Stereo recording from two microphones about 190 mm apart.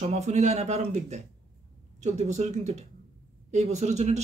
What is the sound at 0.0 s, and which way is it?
Speech, 35° right (ahead or behind).